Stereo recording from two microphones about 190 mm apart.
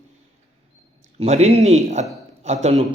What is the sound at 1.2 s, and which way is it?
Speech, 35° right (ahead or behind).